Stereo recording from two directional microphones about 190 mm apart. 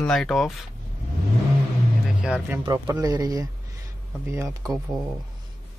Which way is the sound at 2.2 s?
5° right (ahead or behind).